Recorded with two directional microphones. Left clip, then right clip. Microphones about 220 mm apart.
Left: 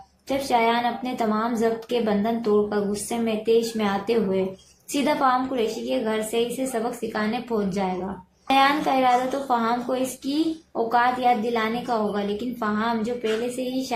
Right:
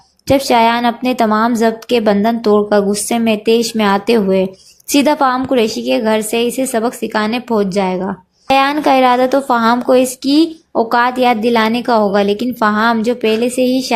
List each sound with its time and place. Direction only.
0.3 s speech: 45° right (ahead or behind)